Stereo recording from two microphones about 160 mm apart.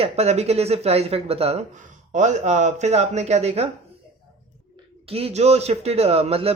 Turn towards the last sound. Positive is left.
turn(degrees=-40)  # may be behind; listen again after turning